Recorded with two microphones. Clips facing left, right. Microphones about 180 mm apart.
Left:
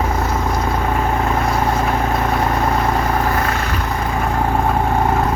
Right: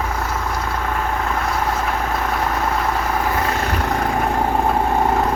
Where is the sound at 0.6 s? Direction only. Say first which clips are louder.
Left 4 dB; 20° left (ahead or behind).